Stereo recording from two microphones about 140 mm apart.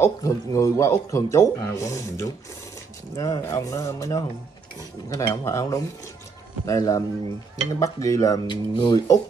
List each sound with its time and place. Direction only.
0.0 s a man's voice: 20° left (ahead or behind)